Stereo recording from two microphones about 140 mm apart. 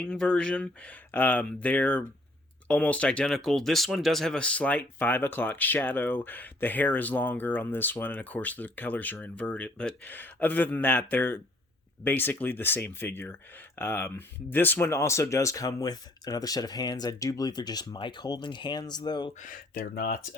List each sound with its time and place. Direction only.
0.0 s speech: 10° left (ahead or behind); by 19.3 s 30° left (ahead or behind)
19.4 s speech: 80° left